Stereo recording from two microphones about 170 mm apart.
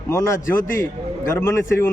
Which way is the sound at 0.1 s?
15° left (ahead or behind).